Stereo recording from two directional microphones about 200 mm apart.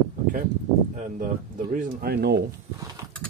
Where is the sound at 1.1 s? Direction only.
45° right (ahead or behind).